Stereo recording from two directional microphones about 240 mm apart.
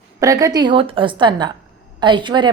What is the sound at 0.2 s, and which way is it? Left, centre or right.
A woman's voice, centre.